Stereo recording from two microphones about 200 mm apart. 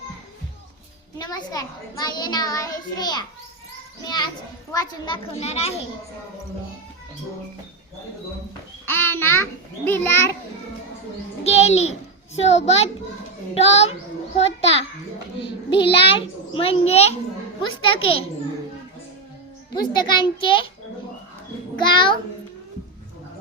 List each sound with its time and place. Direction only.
1.2 s a child's voice: 20° left (ahead or behind)
8.9 s a child's voice: 10° left (ahead or behind)
11.4 s a child's voice: 30° left (ahead or behind)
19.9 s a child's voice: 20° left (ahead or behind)
21.9 s a child's voice: 25° left (ahead or behind)